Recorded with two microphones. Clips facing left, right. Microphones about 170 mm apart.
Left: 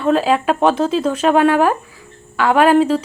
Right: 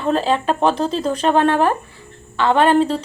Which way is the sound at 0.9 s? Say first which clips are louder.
Left 3 dB; 35° right (ahead or behind).